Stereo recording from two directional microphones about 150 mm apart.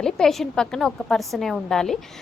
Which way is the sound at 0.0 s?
Centre (ahead or behind).